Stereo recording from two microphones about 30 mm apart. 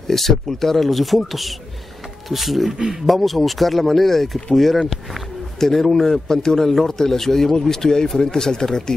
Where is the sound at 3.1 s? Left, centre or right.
Centre.